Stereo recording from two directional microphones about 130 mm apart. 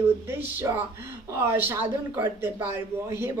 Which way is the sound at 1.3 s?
20° right (ahead or behind).